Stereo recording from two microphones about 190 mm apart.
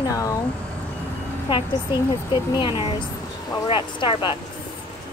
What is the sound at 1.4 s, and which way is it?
A woman's voice, 25° left (ahead or behind).